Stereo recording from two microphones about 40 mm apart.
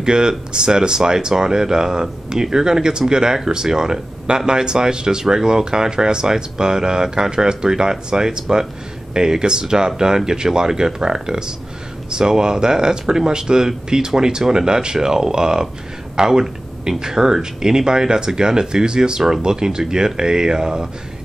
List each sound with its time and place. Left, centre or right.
0.0 s speech: centre